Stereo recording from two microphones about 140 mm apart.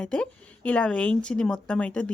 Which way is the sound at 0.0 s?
5° left (ahead or behind).